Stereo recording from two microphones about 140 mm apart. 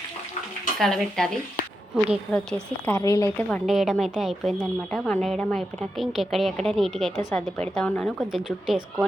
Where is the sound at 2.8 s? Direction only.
20° left (ahead or behind).